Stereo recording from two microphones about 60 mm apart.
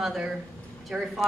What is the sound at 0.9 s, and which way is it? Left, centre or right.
Speech, right.